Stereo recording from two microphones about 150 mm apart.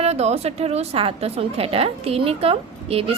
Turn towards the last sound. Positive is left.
turn(degrees=-40)  # may be behind; listen again after turning